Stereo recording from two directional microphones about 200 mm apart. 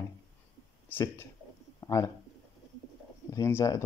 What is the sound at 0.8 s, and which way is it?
Speech, 10° left (ahead or behind).